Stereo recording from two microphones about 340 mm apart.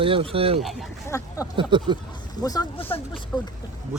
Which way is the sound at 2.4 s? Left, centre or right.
Centre.